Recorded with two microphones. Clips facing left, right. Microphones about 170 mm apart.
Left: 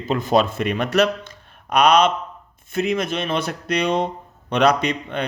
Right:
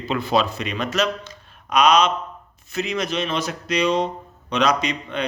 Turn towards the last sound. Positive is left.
turn(degrees=55)  # may be behind; listen again after turning